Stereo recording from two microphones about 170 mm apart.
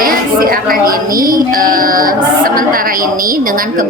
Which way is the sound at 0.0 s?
55° right (ahead or behind).